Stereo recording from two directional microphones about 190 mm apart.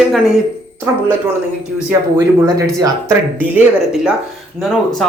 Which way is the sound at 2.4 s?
15° right (ahead or behind).